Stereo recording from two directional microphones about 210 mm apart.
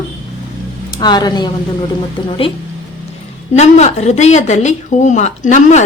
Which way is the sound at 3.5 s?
30° left (ahead or behind).